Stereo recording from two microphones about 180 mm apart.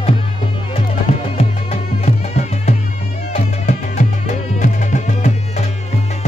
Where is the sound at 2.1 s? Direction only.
40° left (ahead or behind).